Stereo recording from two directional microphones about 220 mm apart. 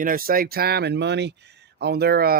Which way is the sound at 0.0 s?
40° right (ahead or behind).